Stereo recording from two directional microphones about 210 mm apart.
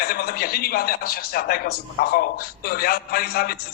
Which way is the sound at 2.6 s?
45° left (ahead or behind).